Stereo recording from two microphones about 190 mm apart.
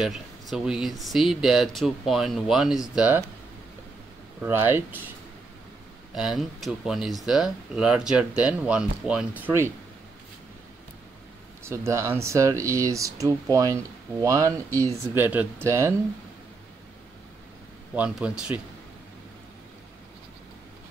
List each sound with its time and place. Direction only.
0.0 s speech: centre (ahead or behind)
4.4 s speech: 10° right (ahead or behind)
6.1 s speech: centre (ahead or behind)
11.6 s speech: 15° right (ahead or behind)
17.9 s speech: 5° right (ahead or behind)